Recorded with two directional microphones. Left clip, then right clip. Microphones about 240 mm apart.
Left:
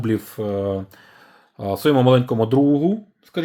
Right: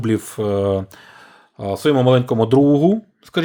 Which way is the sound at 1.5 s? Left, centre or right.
Centre.